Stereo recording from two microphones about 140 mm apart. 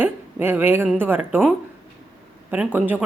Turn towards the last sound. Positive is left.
turn(degrees=-10)  # may be behind; listen again after turning